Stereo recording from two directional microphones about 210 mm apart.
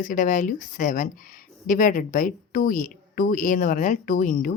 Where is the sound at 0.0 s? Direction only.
40° left (ahead or behind).